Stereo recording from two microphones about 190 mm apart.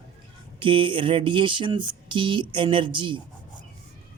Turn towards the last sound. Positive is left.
turn(degrees=-25)  # may be behind; listen again after turning